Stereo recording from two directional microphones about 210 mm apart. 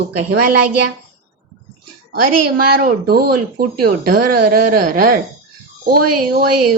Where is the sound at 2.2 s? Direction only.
45° right (ahead or behind).